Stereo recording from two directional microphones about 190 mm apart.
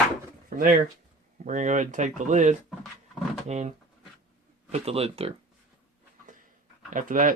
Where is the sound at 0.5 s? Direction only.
45° right (ahead or behind); by 5.3 s 30° right (ahead or behind).